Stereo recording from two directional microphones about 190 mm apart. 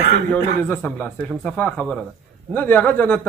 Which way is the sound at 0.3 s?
5° left (ahead or behind).